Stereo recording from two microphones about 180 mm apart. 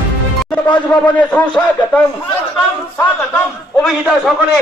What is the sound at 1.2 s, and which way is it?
Speech, 10° left (ahead or behind).